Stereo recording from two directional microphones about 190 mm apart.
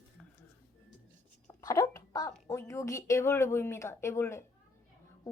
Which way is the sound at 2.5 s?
15° left (ahead or behind).